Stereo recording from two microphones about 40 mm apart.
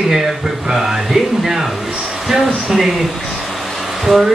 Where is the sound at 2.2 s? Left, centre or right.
Centre.